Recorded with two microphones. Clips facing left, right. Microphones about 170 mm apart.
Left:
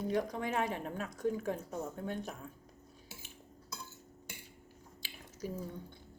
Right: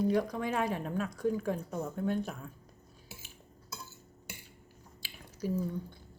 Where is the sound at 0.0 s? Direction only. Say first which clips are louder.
Right 4 dB; 20° left (ahead or behind).